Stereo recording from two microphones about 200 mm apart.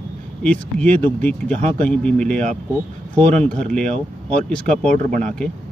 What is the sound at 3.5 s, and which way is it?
Speech, 40° right (ahead or behind).